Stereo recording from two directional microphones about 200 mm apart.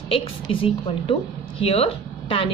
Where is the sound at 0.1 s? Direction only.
25° left (ahead or behind).